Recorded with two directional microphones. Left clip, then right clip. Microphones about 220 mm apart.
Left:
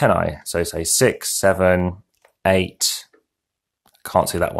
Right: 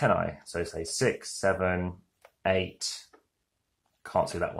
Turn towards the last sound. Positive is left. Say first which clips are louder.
# left 9 dB
turn(degrees=40)  # may be behind; listen again after turning